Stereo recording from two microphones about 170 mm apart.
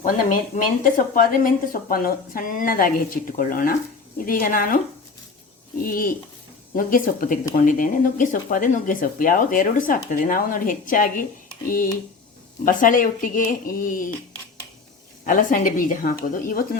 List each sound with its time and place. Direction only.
0.0 s a woman's voice: 50° left (ahead or behind)
5.8 s a woman's voice: 55° left (ahead or behind)
12.6 s speech: 50° left (ahead or behind)
15.2 s speech: 55° left (ahead or behind)